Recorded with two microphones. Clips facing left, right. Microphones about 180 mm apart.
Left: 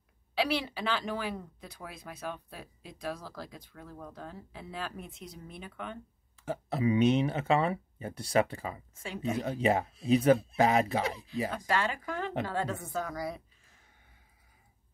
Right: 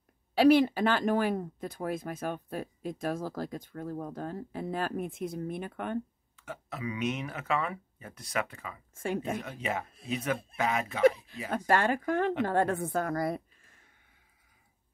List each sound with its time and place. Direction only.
0.3 s speech: 45° right (ahead or behind)
6.3 s speech: 35° left (ahead or behind)
8.9 s speech: 50° right (ahead or behind)
9.4 s speech: 30° left (ahead or behind)
11.5 s a woman's voice: 50° right (ahead or behind)